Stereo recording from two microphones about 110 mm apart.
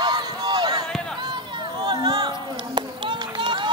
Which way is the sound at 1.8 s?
40° right (ahead or behind).